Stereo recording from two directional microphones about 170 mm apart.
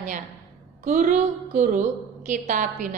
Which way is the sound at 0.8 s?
50° right (ahead or behind).